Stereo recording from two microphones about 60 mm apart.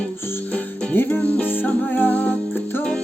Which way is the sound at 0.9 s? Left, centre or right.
Left.